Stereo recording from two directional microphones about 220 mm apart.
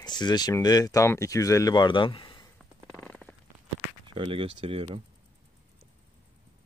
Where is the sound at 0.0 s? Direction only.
20° left (ahead or behind).